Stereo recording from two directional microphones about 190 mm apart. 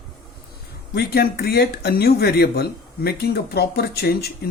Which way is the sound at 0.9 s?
55° left (ahead or behind).